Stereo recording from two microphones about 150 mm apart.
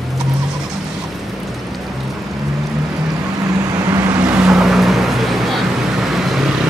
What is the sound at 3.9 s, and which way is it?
Vehicle, 10° right (ahead or behind).